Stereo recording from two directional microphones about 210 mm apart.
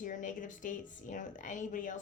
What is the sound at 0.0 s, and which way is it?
A woman's voice, 40° left (ahead or behind).